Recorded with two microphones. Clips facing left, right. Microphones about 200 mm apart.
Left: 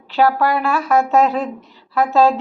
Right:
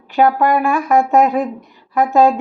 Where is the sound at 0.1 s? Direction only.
15° right (ahead or behind).